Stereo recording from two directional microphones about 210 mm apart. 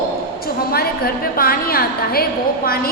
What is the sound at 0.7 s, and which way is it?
A woman's voice, 45° left (ahead or behind).